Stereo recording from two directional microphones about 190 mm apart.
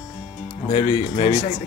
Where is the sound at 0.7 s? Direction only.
30° left (ahead or behind).